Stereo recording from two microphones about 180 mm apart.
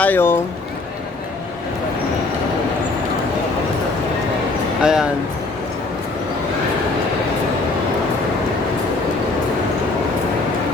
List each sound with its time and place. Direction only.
0.0 s speech: 10° left (ahead or behind)
4.8 s speech: 5° right (ahead or behind)